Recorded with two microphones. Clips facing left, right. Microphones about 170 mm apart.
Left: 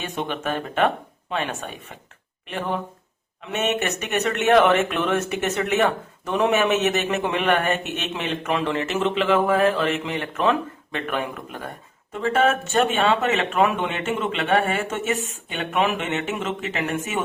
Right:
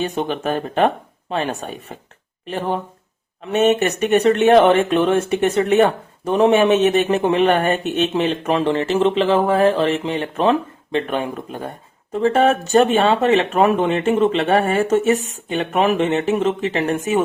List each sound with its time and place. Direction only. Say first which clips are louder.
0.0 s speech: right 6 dB; 35° right (ahead or behind)